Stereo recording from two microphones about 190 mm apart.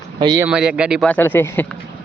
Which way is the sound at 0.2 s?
20° right (ahead or behind).